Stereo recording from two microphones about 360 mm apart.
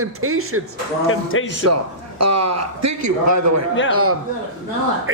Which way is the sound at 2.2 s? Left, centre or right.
Right.